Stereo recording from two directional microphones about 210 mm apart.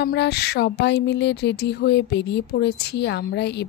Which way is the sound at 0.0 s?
50° left (ahead or behind).